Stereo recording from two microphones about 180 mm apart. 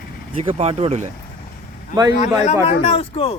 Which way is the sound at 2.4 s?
35° left (ahead or behind).